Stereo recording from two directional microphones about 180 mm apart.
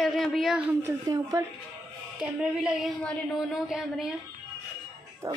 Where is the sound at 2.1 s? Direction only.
5° right (ahead or behind).